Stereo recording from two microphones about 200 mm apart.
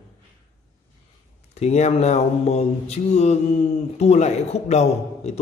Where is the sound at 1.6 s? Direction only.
35° left (ahead or behind).